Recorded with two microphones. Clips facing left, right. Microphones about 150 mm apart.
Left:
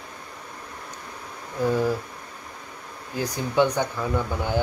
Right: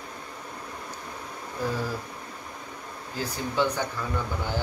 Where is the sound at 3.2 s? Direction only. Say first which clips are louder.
Left 5 dB; 15° left (ahead or behind).